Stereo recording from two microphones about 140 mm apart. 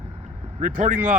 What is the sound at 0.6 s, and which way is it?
Speech, 65° right (ahead or behind).